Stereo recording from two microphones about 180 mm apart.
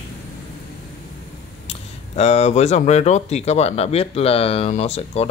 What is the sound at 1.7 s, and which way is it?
Speech, 35° left (ahead or behind).